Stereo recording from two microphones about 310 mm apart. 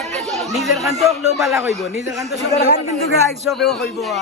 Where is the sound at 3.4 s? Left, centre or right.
Centre.